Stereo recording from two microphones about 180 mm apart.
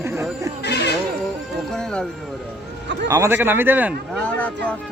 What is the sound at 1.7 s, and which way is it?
Speech, 5° left (ahead or behind).